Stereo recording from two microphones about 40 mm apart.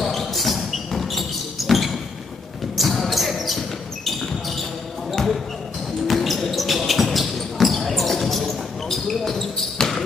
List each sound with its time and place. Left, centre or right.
0.0 s a sound: centre
2.8 s basketball bounce: centre
5.1 s basketball bounce: centre